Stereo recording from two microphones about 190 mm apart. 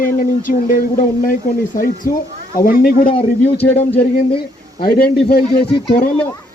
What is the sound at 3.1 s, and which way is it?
Speech, 30° left (ahead or behind).